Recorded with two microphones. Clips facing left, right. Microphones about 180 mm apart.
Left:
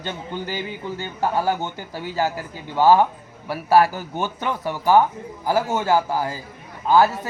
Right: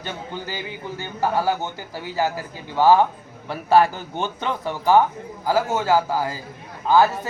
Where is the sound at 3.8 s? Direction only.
5° left (ahead or behind).